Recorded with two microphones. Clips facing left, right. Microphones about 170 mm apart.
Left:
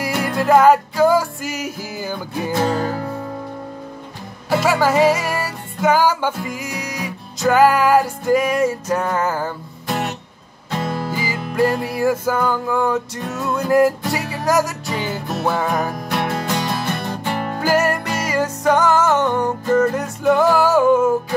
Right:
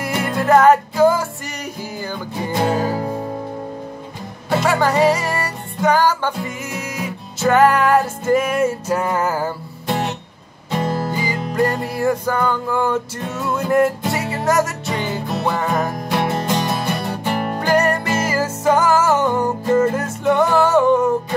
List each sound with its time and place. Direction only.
0.0 s music: centre (ahead or behind)
2.5 s music: 10° right (ahead or behind)
3.0 s music: 25° right (ahead or behind)
4.5 s music: 5° left (ahead or behind)
6.6 s music: 5° right (ahead or behind)
11.1 s music: 5° left (ahead or behind)
16.4 s music: 10° right (ahead or behind)
17.6 s music: 5° left (ahead or behind)